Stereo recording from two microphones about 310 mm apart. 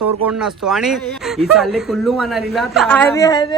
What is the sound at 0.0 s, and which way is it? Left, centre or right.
Speech, right.